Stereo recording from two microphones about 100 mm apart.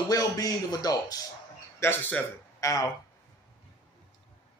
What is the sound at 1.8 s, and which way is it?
Speech, 20° left (ahead or behind).